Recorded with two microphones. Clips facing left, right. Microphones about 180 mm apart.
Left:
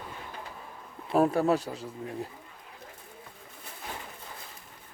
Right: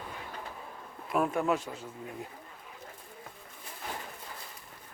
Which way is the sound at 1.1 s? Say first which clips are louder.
Left 5 dB; 35° left (ahead or behind).